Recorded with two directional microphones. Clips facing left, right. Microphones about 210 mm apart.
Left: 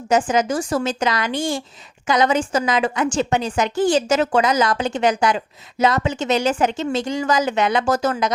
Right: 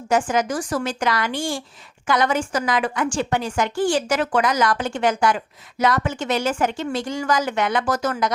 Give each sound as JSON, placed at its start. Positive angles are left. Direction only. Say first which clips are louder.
{"t": 0.1, "sound": "a woman's voice", "louder": "left 2 dB", "side_deg": 20}